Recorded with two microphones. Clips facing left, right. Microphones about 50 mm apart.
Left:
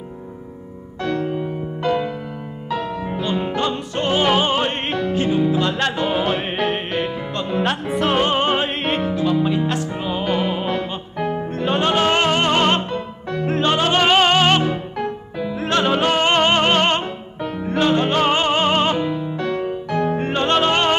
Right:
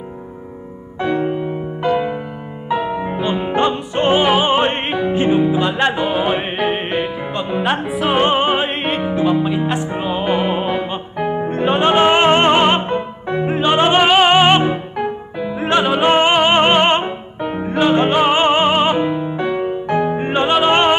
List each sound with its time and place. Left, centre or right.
1.0 s music: right
3.7 s opera: right
4.3 s music: centre
8.2 s music: centre
9.1 s music: right